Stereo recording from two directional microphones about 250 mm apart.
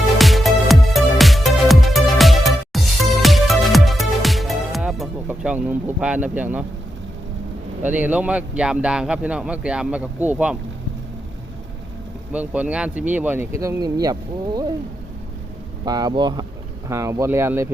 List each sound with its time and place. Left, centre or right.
0.2 s music: centre
7.9 s a man's voice: centre
12.3 s a man's voice: centre
15.8 s speech: centre